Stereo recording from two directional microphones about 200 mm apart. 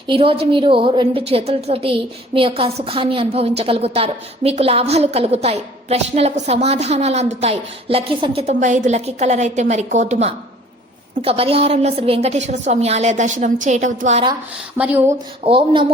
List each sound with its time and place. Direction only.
0.1 s a woman's voice: 25° right (ahead or behind)
14.8 s speech: 10° right (ahead or behind)
15.4 s a woman's voice: 25° right (ahead or behind)